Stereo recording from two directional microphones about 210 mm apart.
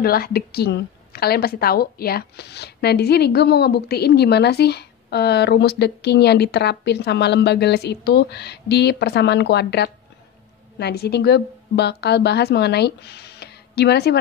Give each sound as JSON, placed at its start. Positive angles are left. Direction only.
{"t": 0.0, "sound": "a woman's voice", "side_deg": 45}